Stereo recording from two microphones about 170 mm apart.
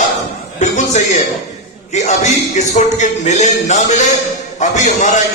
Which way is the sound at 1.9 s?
45° left (ahead or behind).